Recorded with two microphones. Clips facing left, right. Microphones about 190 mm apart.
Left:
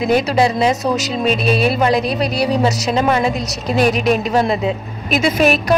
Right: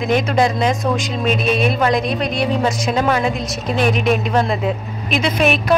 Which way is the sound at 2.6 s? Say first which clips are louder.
Left 2 dB; 5° left (ahead or behind).